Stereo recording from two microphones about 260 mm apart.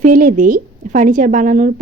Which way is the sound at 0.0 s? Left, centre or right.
Right.